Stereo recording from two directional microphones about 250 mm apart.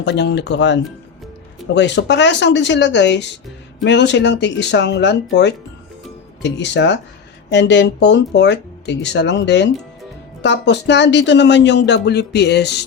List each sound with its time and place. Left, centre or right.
0.0 s speech: left